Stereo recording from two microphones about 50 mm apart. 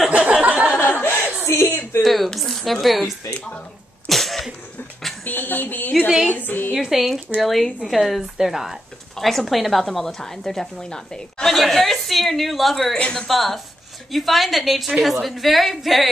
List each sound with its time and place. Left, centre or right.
0.1 s a sound: right
1.0 s a sound: left
2.0 s a woman's voice: centre
3.3 s a woman's voice: left
4.1 s cough: centre
5.2 s a sound: left
5.9 s a woman's voice: centre
6.2 s a sound: left
6.8 s a woman's voice: centre
11.5 s a woman's voice: centre
12.9 s a woman's voice: centre
13.3 s a woman's voice: centre